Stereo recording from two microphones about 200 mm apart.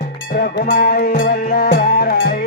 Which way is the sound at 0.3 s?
50° left (ahead or behind).